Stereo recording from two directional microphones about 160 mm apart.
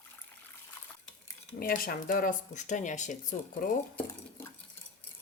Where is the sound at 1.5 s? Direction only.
65° left (ahead or behind).